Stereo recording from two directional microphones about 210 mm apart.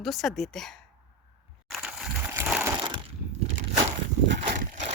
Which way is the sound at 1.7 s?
5° right (ahead or behind).